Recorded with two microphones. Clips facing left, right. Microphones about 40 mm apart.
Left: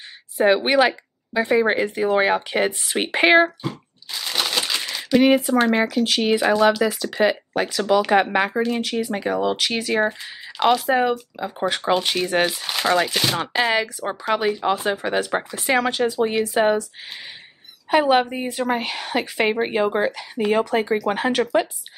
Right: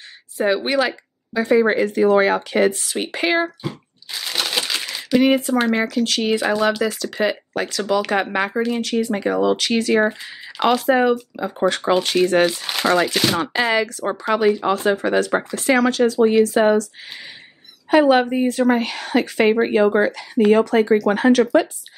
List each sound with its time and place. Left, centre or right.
0.4 s speech: left
3.6 s crumpling: centre
5.2 s speech: centre
6.4 s speech: centre
6.8 s speech: centre
8.5 s speech: centre
13.4 s speech: centre
17.8 s a woman's voice: centre